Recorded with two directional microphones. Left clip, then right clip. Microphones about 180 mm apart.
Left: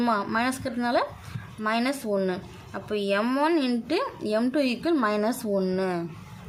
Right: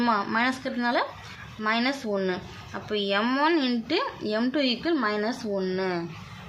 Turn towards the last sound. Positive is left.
turn(degrees=15)  # may be behind; listen again after turning